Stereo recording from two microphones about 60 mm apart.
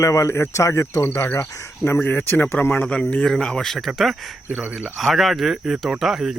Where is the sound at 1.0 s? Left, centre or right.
Left.